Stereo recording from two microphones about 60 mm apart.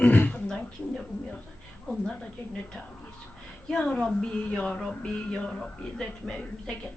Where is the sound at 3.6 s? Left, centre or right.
Centre.